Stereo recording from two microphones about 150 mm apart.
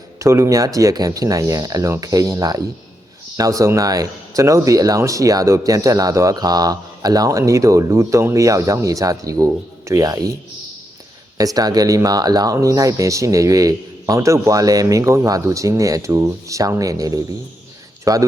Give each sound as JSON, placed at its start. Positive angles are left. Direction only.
{"t": 0.2, "sound": "speech", "side_deg": -20}
{"t": 11.3, "sound": "speech", "side_deg": -25}